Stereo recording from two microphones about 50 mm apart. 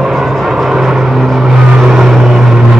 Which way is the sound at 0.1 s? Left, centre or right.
Centre.